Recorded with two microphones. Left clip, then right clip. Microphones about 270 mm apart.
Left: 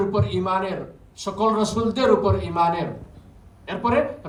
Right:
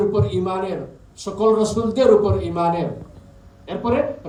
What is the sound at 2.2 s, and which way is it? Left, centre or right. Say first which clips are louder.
Speech: right 1 dB; left.